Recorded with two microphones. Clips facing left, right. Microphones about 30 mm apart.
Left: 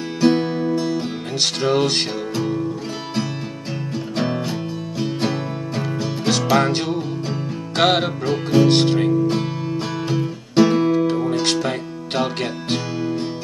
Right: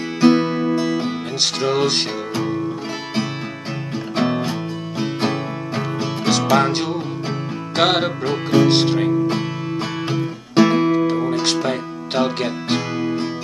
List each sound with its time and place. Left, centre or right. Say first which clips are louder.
0.2 s music: right 2 dB; right
1.4 s music: even; centre
2.3 s music: right 1 dB; centre
4.2 s music: right 3 dB; centre
5.8 s music: right 1 dB; centre
8.3 s speech: even; centre
10.0 s music: even; centre